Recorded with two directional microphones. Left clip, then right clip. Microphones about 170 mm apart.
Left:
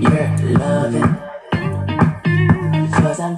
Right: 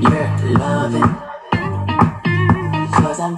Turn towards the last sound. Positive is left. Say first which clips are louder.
# right 2 dB
turn(degrees=10)  # may be behind; listen again after turning